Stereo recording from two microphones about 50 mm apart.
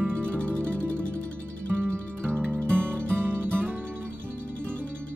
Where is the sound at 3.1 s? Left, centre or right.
Right.